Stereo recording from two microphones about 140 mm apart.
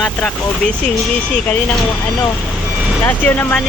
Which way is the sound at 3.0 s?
15° left (ahead or behind).